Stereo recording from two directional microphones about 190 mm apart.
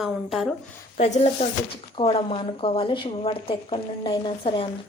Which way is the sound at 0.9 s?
35° left (ahead or behind).